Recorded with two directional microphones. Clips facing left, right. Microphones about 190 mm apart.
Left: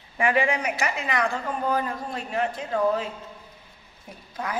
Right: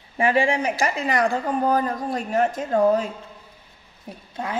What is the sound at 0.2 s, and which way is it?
A woman's voice, 30° right (ahead or behind).